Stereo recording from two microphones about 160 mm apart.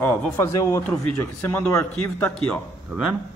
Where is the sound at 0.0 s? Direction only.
10° left (ahead or behind).